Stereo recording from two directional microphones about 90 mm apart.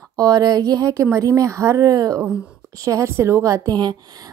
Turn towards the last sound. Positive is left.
turn(degrees=-50)  # may be behind; listen again after turning